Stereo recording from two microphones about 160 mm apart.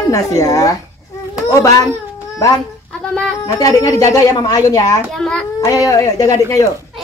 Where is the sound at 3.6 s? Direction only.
20° left (ahead or behind).